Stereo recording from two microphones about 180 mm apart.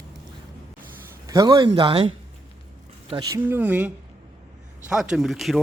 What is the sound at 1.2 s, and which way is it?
Speech, 20° right (ahead or behind).